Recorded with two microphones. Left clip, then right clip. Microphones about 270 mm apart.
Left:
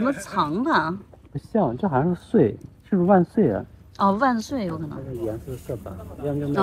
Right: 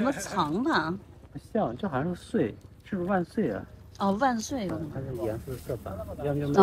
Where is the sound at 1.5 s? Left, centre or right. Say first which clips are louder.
Left 7 dB; centre.